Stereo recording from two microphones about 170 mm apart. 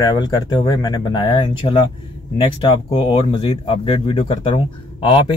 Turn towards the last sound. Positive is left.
turn(degrees=30)  # may be behind; listen again after turning